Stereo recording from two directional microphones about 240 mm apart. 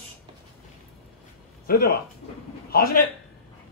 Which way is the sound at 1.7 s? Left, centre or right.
Left.